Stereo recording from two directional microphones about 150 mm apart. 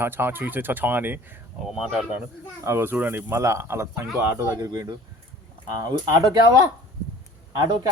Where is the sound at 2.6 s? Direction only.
15° right (ahead or behind).